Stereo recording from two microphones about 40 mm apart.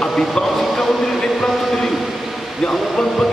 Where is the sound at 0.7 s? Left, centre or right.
Centre.